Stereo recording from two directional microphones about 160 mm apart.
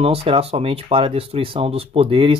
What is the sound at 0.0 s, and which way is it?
Speech, 35° right (ahead or behind).